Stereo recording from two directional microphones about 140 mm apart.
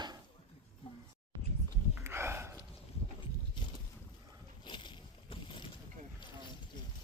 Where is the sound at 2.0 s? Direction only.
20° right (ahead or behind).